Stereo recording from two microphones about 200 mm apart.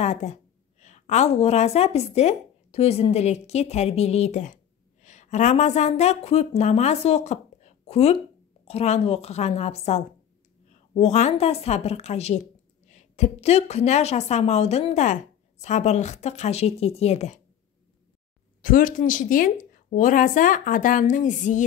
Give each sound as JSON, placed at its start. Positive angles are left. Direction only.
{"t": 0.0, "sound": "a woman's voice", "side_deg": 35}
{"t": 18.6, "sound": "a woman's voice", "side_deg": 45}